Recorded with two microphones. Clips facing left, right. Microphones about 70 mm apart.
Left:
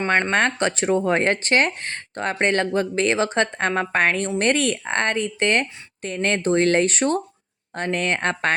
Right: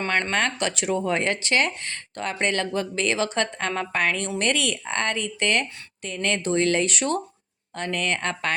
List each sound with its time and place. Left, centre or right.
0.1 s speech: left